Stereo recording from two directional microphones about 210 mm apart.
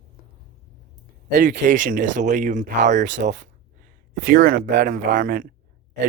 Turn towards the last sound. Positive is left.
turn(degrees=-45)  # may be behind; listen again after turning